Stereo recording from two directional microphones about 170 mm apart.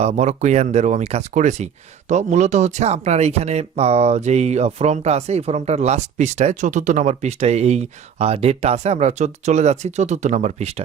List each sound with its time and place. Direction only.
0.0 s speech: 40° right (ahead or behind)